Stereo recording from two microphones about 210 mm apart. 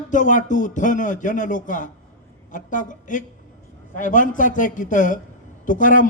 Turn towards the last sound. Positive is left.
turn(degrees=40)  # may be behind; listen again after turning